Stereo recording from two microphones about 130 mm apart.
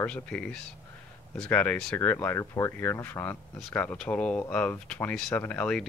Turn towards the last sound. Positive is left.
turn(degrees=10)  # may be behind; listen again after turning